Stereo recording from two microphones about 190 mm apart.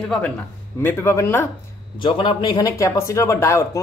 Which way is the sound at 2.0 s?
25° left (ahead or behind).